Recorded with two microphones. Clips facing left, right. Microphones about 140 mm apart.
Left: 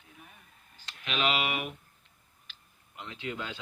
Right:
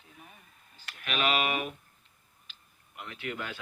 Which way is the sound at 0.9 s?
20° left (ahead or behind).